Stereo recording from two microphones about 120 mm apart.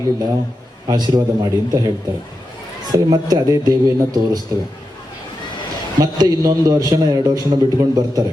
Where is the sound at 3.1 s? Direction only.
35° right (ahead or behind).